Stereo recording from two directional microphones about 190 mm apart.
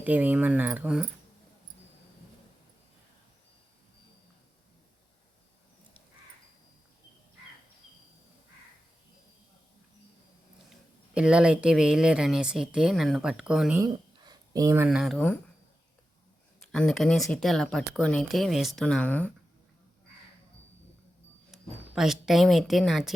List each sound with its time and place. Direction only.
0.0 s speech: 10° right (ahead or behind)
10.7 s speech: 5° right (ahead or behind)
13.7 s a sound: 20° right (ahead or behind)
14.8 s speech: centre (ahead or behind)
16.7 s speech: centre (ahead or behind)
21.5 s speech: centre (ahead or behind)